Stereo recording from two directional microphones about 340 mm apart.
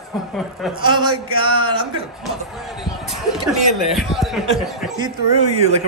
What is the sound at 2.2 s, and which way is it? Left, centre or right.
Speech, centre.